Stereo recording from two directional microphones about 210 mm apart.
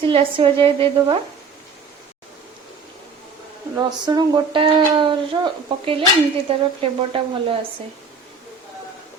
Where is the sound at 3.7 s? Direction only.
20° right (ahead or behind).